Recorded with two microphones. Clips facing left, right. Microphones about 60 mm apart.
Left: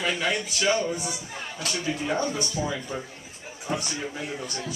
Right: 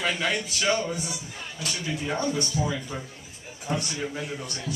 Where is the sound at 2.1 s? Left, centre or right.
Left.